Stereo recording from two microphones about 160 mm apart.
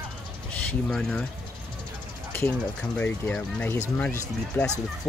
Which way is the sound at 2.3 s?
10° left (ahead or behind).